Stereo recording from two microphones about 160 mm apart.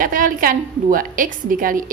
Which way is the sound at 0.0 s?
60° right (ahead or behind).